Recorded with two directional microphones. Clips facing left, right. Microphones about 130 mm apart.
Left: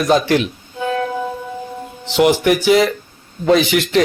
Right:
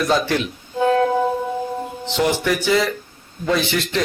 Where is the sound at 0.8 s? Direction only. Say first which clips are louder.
Right 4 dB; 30° right (ahead or behind).